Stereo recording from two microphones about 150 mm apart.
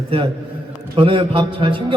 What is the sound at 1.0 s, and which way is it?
Speech, 35° right (ahead or behind).